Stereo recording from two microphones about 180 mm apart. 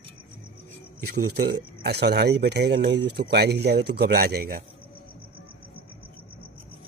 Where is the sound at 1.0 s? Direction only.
65° right (ahead or behind).